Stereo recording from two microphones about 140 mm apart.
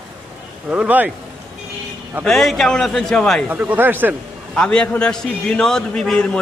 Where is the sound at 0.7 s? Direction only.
10° right (ahead or behind).